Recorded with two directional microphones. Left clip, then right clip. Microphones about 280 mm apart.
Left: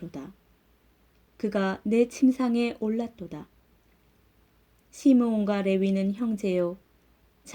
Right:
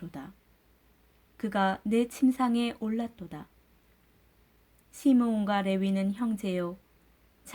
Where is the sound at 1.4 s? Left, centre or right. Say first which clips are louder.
Even; right.